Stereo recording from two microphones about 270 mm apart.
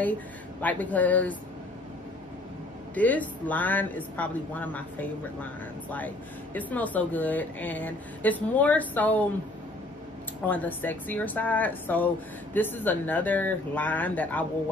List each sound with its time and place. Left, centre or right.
0.0 s speech: centre
2.9 s speech: centre
10.5 s speech: centre